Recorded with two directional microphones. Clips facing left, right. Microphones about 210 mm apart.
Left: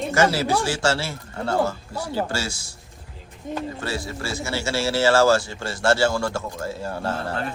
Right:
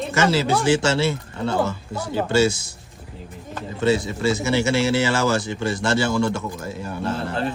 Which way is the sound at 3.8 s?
20° right (ahead or behind).